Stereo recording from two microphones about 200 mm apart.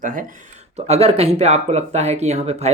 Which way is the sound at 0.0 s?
40° right (ahead or behind).